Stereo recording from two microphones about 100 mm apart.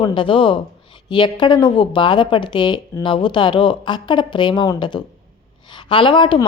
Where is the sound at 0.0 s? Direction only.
55° left (ahead or behind).